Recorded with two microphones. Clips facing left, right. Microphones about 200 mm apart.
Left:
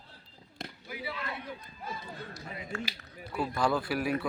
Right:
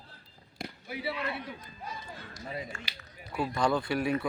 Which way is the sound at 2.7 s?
60° left (ahead or behind).